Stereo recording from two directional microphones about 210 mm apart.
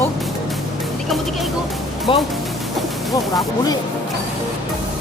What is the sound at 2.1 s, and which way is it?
Speech, 25° left (ahead or behind).